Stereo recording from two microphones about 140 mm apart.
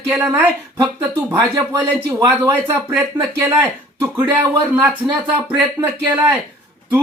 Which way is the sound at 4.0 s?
30° right (ahead or behind).